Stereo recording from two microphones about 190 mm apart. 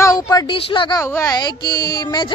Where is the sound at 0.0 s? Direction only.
20° left (ahead or behind).